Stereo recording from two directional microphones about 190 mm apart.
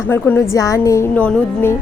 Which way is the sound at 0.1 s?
10° left (ahead or behind).